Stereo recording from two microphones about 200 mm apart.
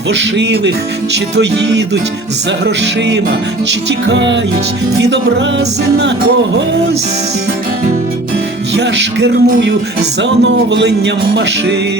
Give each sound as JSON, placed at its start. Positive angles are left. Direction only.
{"t": 0.1, "sound": "music", "side_deg": -60}
{"t": 3.7, "sound": "music", "side_deg": -65}
{"t": 8.7, "sound": "music", "side_deg": -60}